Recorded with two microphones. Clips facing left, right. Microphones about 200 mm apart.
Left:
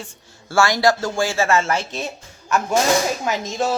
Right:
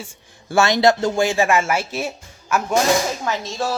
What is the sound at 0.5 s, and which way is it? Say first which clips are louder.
Speech: right 2 dB; 20° right (ahead or behind).